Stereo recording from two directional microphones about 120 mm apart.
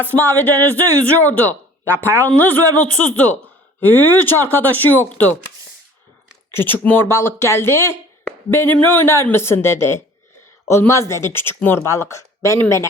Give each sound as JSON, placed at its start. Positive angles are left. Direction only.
{"t": 0.1, "sound": "speech", "side_deg": 15}
{"t": 6.5, "sound": "speech", "side_deg": 20}